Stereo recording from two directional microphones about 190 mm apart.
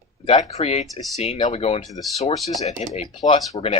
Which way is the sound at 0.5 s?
35° left (ahead or behind).